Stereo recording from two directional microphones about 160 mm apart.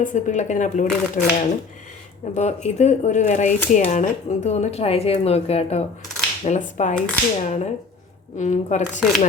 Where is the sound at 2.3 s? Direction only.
45° left (ahead or behind).